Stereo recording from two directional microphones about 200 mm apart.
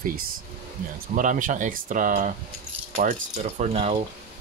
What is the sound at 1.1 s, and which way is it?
Speech, 40° right (ahead or behind).